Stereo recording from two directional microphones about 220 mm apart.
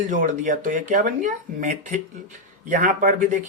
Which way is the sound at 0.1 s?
35° right (ahead or behind).